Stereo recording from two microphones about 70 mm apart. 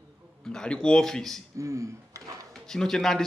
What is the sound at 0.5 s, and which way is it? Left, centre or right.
Speech, centre.